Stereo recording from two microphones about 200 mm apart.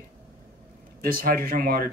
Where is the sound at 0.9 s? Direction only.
45° right (ahead or behind).